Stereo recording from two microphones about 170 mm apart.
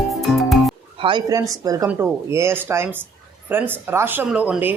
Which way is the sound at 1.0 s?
25° right (ahead or behind).